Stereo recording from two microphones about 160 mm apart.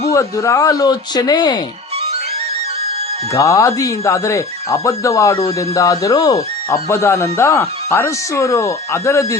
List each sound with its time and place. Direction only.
0.1 s speech: 20° left (ahead or behind)
3.3 s speech: 20° left (ahead or behind)